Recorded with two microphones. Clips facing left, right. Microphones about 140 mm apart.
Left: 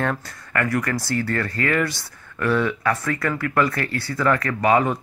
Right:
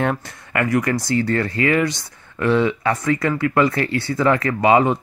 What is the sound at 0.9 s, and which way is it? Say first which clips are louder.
Speech: right 4 dB; 5° left (ahead or behind).